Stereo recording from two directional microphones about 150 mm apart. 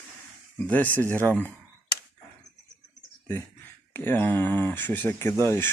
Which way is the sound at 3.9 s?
15° left (ahead or behind).